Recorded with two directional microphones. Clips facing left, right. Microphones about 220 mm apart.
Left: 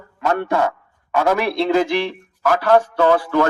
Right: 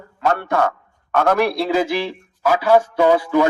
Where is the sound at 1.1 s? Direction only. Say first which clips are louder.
Right 1 dB; 10° left (ahead or behind).